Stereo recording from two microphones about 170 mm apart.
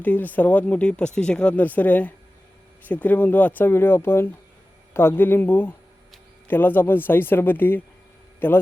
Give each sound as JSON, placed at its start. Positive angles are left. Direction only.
{"t": 0.0, "sound": "a man's voice", "side_deg": 10}